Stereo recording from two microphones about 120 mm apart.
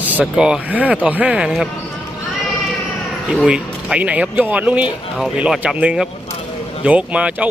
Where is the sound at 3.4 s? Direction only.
10° right (ahead or behind).